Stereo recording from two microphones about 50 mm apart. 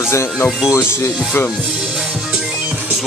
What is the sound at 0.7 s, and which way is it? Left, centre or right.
Speech, left.